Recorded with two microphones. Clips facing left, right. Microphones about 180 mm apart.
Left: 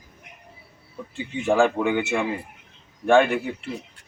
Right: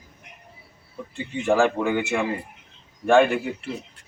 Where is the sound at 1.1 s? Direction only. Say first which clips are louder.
Even; centre (ahead or behind).